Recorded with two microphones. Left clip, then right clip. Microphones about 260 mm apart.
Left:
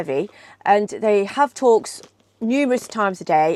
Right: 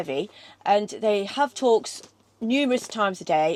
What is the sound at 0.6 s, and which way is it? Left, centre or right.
Speech, left.